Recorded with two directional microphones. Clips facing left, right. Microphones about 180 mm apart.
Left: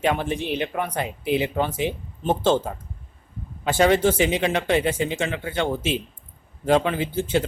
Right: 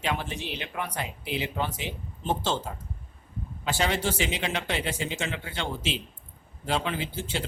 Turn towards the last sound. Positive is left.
turn(degrees=50)  # may be behind; listen again after turning